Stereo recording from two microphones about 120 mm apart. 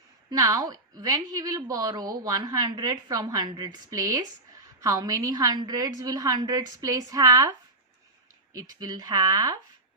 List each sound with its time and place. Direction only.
0.3 s a woman's voice: 30° right (ahead or behind)
8.5 s a woman's voice: 30° right (ahead or behind)